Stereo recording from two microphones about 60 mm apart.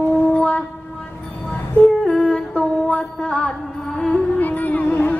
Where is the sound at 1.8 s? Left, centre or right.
Centre.